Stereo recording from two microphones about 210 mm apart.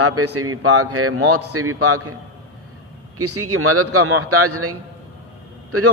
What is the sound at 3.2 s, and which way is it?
A man's voice, 90° right.